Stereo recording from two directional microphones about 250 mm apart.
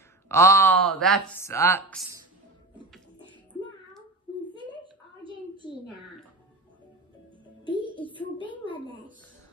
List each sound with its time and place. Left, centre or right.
0.3 s a woman's voice: centre
7.6 s music: centre
8.6 s a child's voice: centre